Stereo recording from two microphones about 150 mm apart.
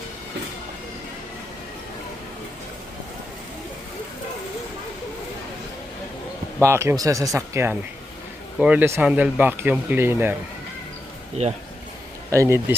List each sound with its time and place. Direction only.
6.6 s speech: 20° right (ahead or behind)
11.4 s speech: 50° right (ahead or behind)
12.3 s speech: 20° right (ahead or behind)